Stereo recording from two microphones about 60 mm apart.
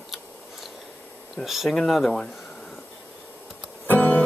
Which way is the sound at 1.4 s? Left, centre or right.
Centre.